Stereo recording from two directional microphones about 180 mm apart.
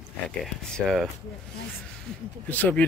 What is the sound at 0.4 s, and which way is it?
Speech, 5° left (ahead or behind).